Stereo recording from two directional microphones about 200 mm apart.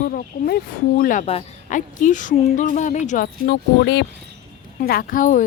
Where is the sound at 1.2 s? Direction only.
30° left (ahead or behind).